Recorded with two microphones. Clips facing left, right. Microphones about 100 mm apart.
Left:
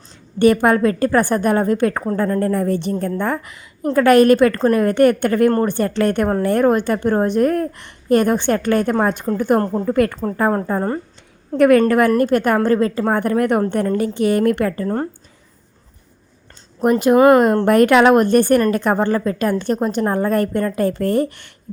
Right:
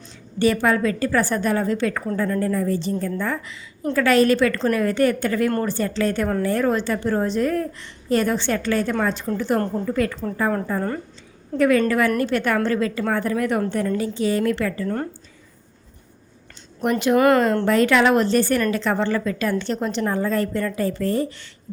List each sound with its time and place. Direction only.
0.3 s a woman's voice: 55° left (ahead or behind)
2.5 s a woman's voice: 60° left (ahead or behind)
9.6 s a woman's voice: 35° left (ahead or behind)
9.9 s a woman's voice: 55° left (ahead or behind)
10.5 s a woman's voice: 35° left (ahead or behind)
11.5 s a woman's voice: 55° left (ahead or behind); by 13.1 s 40° left (ahead or behind)
13.1 s a woman's voice: 55° left (ahead or behind)
16.8 s a woman's voice: 40° left (ahead or behind)
17.2 s speech: 20° left (ahead or behind)
17.7 s a woman's voice: 55° left (ahead or behind)